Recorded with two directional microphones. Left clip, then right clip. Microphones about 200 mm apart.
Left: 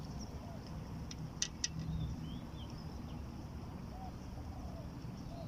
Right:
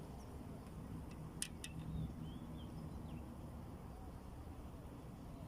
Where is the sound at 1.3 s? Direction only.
35° left (ahead or behind).